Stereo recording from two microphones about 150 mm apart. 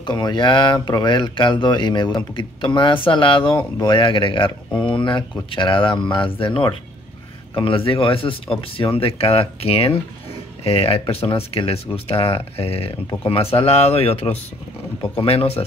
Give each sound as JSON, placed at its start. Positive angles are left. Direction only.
{"t": 0.0, "sound": "speech", "side_deg": 30}